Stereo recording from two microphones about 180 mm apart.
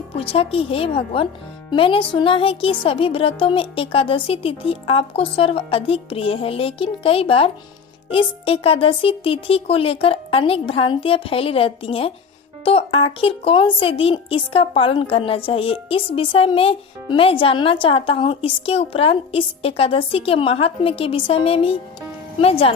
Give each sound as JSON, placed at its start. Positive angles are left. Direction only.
{"t": 0.2, "sound": "a woman's voice", "side_deg": 30}